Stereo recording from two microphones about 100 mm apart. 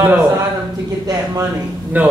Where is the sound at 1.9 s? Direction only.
15° right (ahead or behind).